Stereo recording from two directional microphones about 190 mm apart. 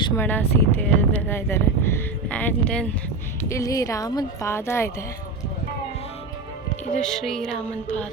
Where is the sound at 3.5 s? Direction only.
15° left (ahead or behind).